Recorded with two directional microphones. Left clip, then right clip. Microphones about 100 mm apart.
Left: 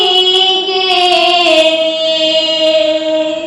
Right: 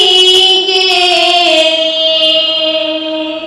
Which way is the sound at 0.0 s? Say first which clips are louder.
Right 3 dB; 30° right (ahead or behind).